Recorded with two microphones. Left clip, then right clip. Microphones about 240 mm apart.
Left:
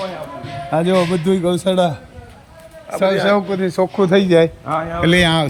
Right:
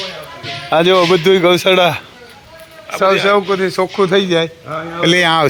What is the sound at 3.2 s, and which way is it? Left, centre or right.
A man's voice, centre.